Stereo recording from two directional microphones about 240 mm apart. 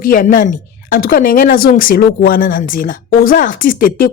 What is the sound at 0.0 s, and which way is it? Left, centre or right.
A woman's voice, left.